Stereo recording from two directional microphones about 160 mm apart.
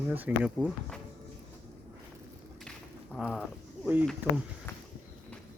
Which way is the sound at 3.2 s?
Centre (ahead or behind).